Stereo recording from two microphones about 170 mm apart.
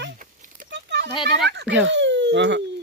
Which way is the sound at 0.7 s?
90° right.